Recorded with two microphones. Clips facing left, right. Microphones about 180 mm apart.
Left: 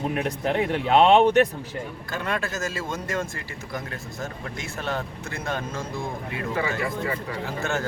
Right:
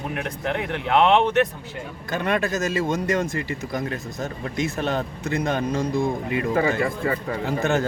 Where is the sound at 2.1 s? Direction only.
20° right (ahead or behind).